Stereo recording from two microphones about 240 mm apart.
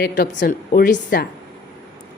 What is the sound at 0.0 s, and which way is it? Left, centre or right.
A woman's voice, left.